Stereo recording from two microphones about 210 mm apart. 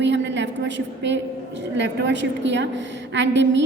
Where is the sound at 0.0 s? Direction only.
60° right (ahead or behind).